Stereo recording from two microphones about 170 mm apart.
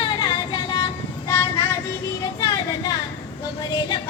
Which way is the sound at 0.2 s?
25° left (ahead or behind).